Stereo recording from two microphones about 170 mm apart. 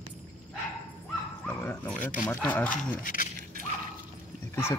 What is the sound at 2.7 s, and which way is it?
Speech, 50° left (ahead or behind).